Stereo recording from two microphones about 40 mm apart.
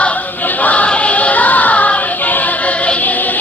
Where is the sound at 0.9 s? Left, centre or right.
Left.